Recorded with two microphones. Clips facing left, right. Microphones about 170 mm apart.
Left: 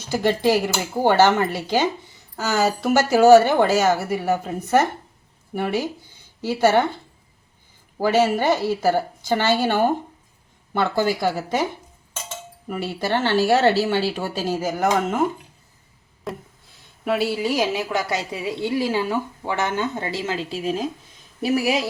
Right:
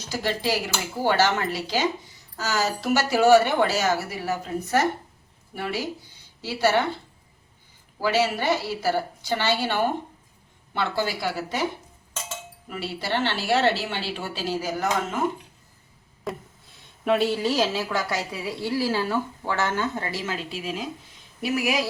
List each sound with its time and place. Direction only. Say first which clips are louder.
0.1 s a woman's voice: left 7 dB; 55° left (ahead or behind)
7.9 s a woman's voice: left 5 dB; 50° left (ahead or behind)
12.6 s a woman's voice: left 6 dB; 50° left (ahead or behind)
16.2 s speech: left 1 dB; centre (ahead or behind); by 21.8 s 30° left (ahead or behind)